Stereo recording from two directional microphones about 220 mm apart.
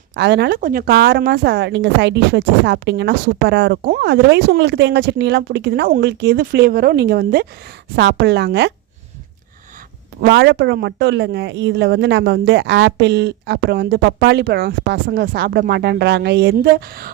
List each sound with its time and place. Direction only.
0.2 s speech: 50° right (ahead or behind)
10.2 s speech: 50° right (ahead or behind)